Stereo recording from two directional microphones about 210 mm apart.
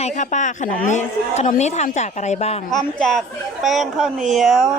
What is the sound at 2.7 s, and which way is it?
Speech, centre (ahead or behind).